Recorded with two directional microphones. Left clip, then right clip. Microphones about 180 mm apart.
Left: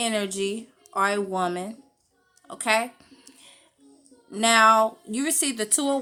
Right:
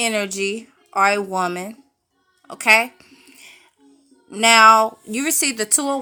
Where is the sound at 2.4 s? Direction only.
25° right (ahead or behind).